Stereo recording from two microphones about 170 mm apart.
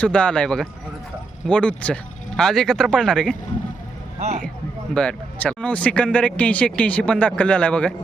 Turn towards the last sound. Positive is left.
turn(degrees=5)  # may be behind; listen again after turning